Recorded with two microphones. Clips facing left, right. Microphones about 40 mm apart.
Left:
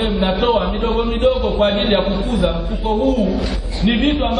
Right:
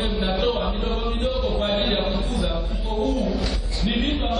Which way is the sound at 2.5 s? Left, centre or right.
Left.